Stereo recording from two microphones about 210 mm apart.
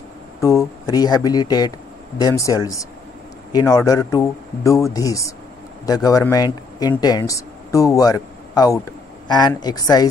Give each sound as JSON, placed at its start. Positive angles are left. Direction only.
{"t": 0.4, "sound": "speech", "side_deg": 15}